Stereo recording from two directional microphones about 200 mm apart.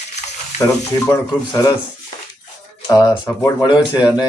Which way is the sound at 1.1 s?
15° left (ahead or behind).